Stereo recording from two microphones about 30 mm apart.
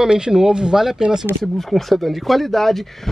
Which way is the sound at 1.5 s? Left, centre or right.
Centre.